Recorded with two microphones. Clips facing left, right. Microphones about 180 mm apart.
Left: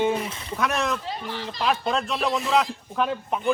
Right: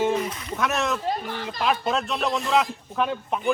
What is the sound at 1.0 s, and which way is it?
Speech, 50° right (ahead or behind).